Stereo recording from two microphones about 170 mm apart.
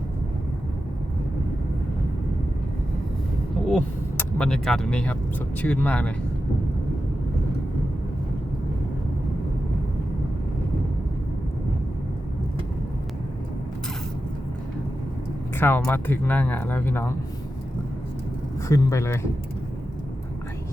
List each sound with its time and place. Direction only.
3.7 s a sound: 5° left (ahead or behind)
5.6 s speech: 10° left (ahead or behind)
15.5 s speech: 10° left (ahead or behind)
18.7 s speech: 15° left (ahead or behind)